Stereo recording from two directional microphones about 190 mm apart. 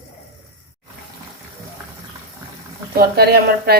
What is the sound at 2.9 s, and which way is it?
Speech, 55° right (ahead or behind).